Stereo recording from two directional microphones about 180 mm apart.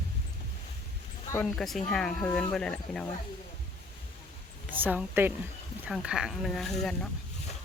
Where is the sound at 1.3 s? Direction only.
5° left (ahead or behind).